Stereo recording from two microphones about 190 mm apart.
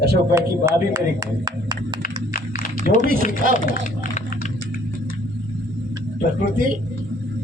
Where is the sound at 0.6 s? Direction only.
15° right (ahead or behind).